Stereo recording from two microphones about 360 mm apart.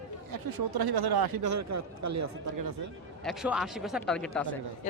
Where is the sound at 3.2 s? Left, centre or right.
Centre.